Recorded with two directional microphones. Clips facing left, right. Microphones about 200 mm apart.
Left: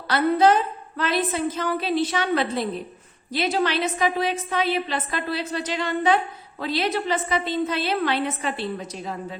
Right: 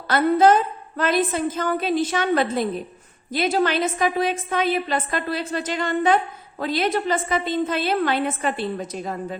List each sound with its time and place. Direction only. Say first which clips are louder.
0.1 s a woman's voice: right 2 dB; 45° right (ahead or behind)